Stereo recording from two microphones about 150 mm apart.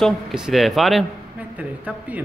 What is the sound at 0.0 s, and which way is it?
A man's voice, centre (ahead or behind).